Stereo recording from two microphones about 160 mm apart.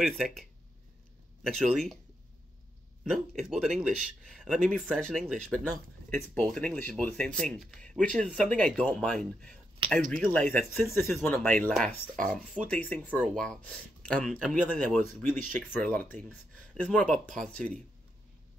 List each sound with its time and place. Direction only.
0.0 s speech: centre (ahead or behind)
3.0 s speech: centre (ahead or behind)
15.2 s speech: 55° right (ahead or behind)
15.7 s speech: 10° left (ahead or behind)